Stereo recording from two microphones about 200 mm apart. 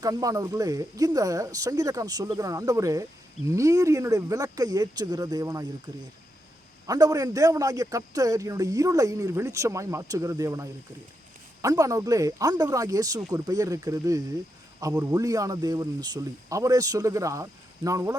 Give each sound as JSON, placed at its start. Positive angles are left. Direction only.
{"t": 0.0, "sound": "a man's voice", "side_deg": -20}
{"t": 6.8, "sound": "a man's voice", "side_deg": -20}